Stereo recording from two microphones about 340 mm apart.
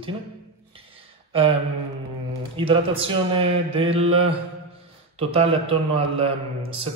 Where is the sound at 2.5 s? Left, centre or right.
Centre.